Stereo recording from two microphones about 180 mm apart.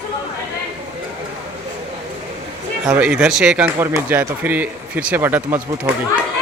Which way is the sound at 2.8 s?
5° right (ahead or behind).